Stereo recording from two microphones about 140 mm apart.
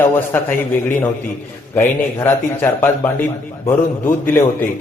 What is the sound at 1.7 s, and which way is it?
A man's voice, 15° left (ahead or behind).